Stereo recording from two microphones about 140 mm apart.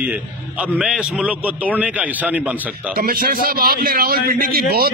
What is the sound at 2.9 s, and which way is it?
A man's voice, 90° right.